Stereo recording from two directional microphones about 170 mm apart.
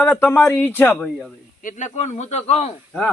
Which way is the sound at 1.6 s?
45° left (ahead or behind).